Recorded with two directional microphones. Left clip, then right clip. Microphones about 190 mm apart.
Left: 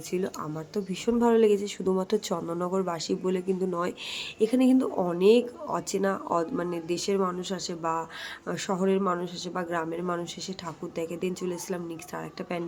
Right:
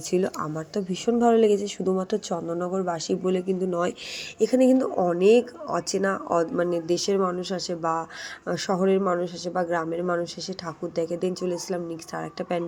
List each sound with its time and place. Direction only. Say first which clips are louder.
0.1 s speech: right 6 dB; 20° right (ahead or behind)